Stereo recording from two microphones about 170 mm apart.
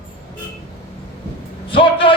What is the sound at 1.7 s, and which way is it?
Speech, 30° left (ahead or behind).